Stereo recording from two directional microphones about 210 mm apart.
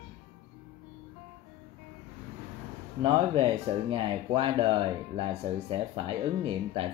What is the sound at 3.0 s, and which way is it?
Speech, 25° right (ahead or behind).